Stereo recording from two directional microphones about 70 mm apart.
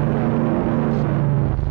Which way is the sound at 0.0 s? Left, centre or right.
Right.